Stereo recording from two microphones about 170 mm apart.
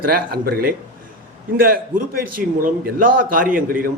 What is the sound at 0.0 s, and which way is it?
A man's voice, 65° right (ahead or behind).